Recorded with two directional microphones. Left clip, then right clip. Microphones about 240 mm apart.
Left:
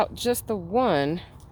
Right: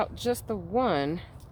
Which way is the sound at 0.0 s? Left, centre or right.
Left.